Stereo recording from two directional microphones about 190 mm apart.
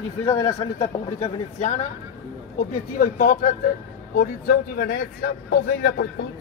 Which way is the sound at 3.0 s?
45° left (ahead or behind).